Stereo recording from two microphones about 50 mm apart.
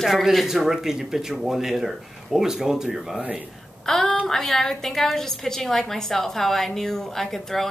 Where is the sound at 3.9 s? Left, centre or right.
Centre.